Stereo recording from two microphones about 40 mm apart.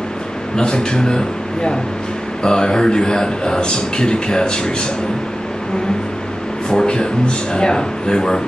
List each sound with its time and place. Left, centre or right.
0.6 s a man's voice: left
6.7 s a man's voice: centre